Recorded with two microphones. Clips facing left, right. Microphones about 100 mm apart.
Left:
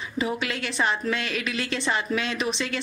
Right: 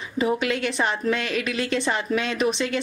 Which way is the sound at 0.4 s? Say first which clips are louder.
Right 3 dB; 50° right (ahead or behind).